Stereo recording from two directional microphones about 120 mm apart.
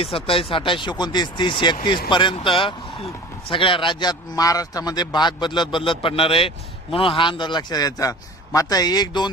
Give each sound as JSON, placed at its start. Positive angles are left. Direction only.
{"t": 0.0, "sound": "a man's voice", "side_deg": 50}